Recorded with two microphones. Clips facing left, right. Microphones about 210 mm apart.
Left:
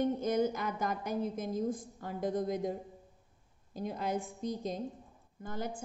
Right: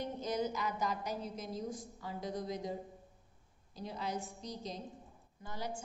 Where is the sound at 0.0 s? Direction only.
55° left (ahead or behind).